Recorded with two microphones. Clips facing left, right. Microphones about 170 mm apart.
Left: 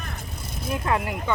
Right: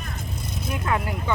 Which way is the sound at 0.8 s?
25° left (ahead or behind).